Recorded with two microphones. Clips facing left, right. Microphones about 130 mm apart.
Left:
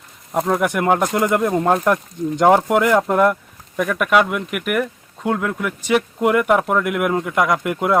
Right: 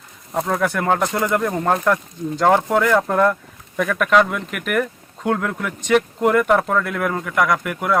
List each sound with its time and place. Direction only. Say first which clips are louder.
0.3 s speech: left 2 dB; 15° left (ahead or behind)